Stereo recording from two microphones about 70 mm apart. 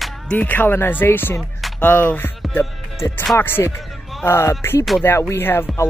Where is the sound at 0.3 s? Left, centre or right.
Left.